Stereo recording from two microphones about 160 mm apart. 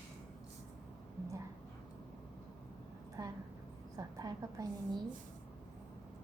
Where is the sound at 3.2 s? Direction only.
25° right (ahead or behind).